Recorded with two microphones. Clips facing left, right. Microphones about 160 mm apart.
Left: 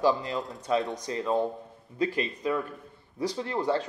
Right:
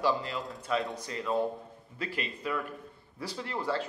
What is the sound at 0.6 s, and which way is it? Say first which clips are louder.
Speech: left 4 dB; 20° left (ahead or behind).